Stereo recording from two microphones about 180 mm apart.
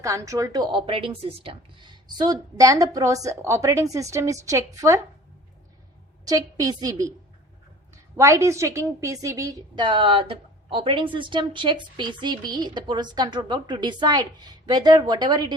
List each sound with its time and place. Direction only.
0.0 s a woman's voice: 15° right (ahead or behind)
6.2 s a woman's voice: 20° right (ahead or behind)
8.1 s a woman's voice: 15° right (ahead or behind)